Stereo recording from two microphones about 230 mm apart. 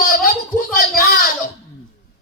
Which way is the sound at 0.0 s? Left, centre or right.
Left.